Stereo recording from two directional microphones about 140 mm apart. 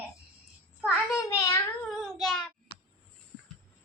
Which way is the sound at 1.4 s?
25° left (ahead or behind).